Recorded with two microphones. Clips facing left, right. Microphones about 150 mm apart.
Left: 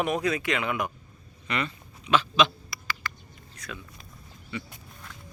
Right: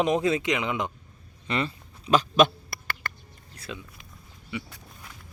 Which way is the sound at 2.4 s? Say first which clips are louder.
Right 4 dB; 55° right (ahead or behind).